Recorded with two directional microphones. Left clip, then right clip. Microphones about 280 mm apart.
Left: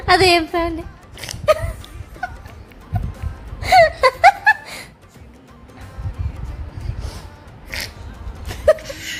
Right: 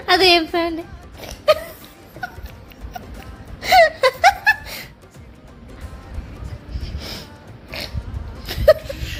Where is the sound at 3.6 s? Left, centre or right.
Left.